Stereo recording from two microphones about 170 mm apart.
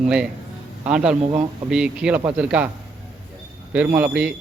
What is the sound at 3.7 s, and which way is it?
Speech, 10° right (ahead or behind).